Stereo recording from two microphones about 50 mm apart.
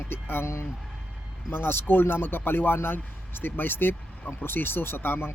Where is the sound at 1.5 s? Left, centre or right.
Left.